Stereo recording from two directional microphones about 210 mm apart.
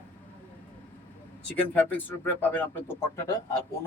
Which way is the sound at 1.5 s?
10° left (ahead or behind).